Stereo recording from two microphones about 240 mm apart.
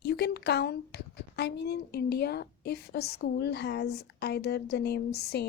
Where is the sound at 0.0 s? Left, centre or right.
Left.